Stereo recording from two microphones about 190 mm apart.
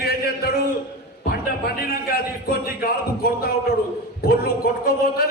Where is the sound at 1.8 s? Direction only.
50° left (ahead or behind).